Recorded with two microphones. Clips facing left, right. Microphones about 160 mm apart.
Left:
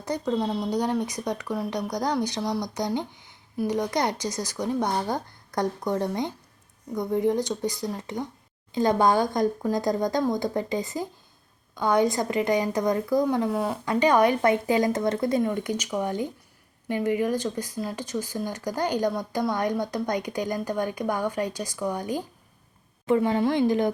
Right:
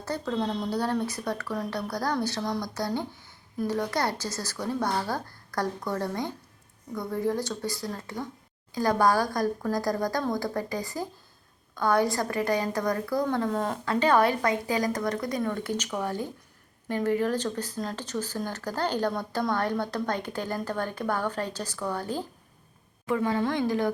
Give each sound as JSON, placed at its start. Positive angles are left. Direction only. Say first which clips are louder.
{"t": 0.0, "sound": "a woman's voice", "louder": "left 3 dB", "side_deg": 15}